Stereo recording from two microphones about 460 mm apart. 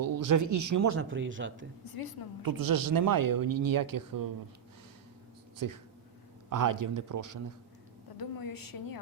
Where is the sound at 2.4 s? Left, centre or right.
Right.